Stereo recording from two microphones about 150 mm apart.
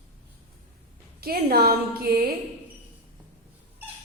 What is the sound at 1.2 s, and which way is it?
A woman's voice, 90° right.